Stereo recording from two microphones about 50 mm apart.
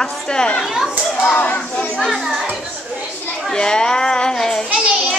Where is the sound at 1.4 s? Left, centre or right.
Left.